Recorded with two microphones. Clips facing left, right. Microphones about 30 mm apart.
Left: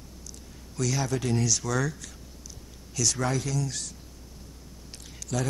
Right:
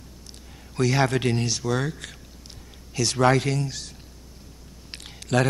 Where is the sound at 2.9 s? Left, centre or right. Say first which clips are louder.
Right 2 dB; right.